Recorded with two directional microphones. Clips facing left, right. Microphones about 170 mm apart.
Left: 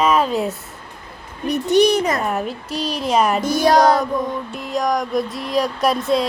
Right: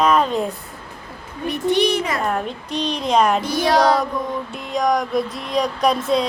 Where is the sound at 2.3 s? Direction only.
5° left (ahead or behind).